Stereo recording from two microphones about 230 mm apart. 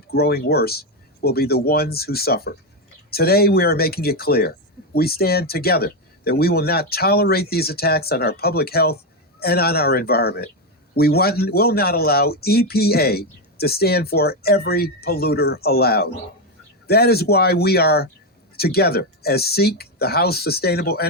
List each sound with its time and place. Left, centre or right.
0.1 s speech: left